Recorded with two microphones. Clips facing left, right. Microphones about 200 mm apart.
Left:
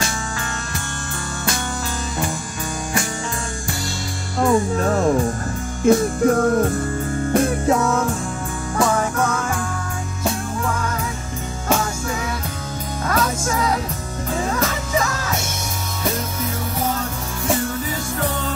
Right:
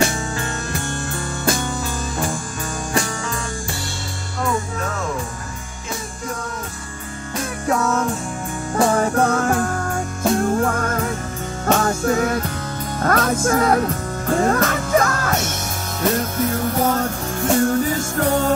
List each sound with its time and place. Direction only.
4.5 s music: 35° left (ahead or behind)
5.9 s music: 55° left (ahead or behind)
7.4 s music: 25° left (ahead or behind)
8.7 s music: 30° right (ahead or behind)
10.3 s music: 50° right (ahead or behind)
16.9 s music: 50° right (ahead or behind)